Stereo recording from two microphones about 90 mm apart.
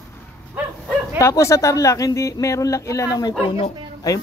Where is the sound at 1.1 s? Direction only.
35° left (ahead or behind).